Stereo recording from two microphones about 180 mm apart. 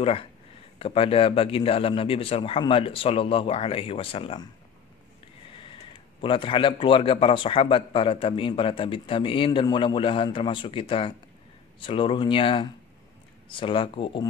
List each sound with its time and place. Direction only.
0.0 s a man's voice: 30° left (ahead or behind)
5.6 s a man's voice: 30° left (ahead or behind)